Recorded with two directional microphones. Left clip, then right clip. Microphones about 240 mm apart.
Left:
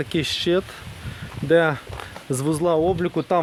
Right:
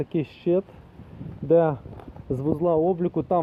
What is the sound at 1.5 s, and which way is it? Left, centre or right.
Speech, left.